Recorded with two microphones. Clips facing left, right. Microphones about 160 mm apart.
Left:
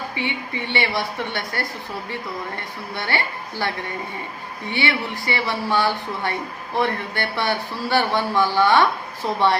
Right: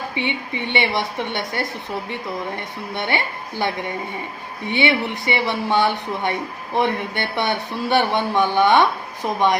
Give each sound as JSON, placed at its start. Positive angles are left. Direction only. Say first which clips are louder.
{"t": 0.2, "sound": "speech", "louder": "right 3 dB", "side_deg": -20}